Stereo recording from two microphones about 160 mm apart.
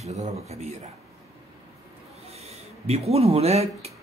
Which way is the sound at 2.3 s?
40° right (ahead or behind).